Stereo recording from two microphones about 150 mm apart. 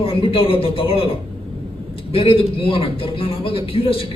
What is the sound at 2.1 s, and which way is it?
A man's voice, 40° left (ahead or behind).